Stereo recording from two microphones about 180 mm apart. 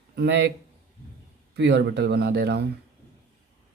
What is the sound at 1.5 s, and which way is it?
Speech, 65° right (ahead or behind).